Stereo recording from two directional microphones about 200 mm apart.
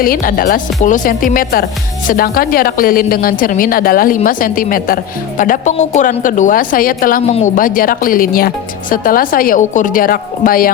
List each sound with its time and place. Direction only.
0.0 s speech: 45° left (ahead or behind)
7.3 s speech: 35° left (ahead or behind)